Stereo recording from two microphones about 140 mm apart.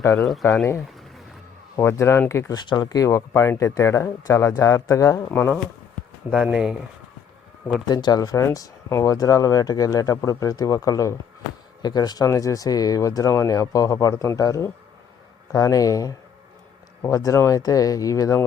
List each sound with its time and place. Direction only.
0.4 s speech: 20° left (ahead or behind)
1.7 s speech: 20° left (ahead or behind)
6.3 s speech: 5° right (ahead or behind)
7.9 s speech: 30° left (ahead or behind)